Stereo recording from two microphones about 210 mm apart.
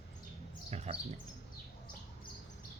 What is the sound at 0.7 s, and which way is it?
Speech, 30° right (ahead or behind).